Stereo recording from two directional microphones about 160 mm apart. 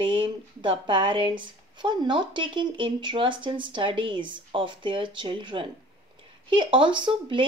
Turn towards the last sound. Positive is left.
turn(degrees=-30)  # may be behind; listen again after turning